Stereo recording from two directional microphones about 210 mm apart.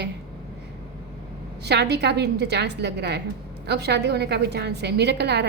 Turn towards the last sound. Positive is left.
turn(degrees=-55)  # may be behind; listen again after turning